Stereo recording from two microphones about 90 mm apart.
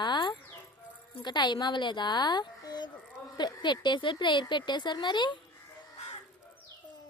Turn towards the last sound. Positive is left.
turn(degrees=60)  # may be behind; listen again after turning